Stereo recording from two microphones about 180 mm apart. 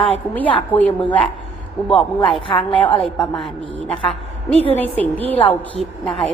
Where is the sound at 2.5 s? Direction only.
30° left (ahead or behind).